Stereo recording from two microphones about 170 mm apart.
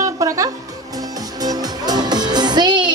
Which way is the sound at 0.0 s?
20° right (ahead or behind).